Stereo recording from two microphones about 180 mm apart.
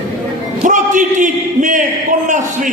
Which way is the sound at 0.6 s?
45° right (ahead or behind).